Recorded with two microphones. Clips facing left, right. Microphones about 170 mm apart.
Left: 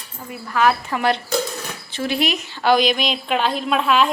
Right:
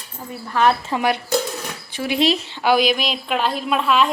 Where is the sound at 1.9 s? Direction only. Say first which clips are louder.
Even; 15° right (ahead or behind).